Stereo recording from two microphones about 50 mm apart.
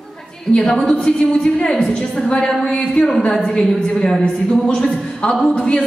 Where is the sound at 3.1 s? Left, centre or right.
Centre.